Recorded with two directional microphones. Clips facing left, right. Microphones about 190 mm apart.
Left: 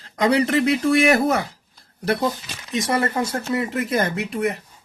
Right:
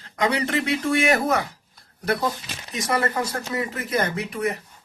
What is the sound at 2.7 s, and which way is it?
Speech, 25° left (ahead or behind).